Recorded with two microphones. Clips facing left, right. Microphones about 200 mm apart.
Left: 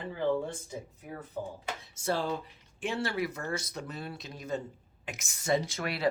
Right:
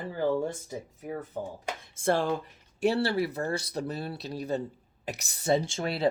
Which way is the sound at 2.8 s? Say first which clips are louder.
Right 6 dB; 35° right (ahead or behind).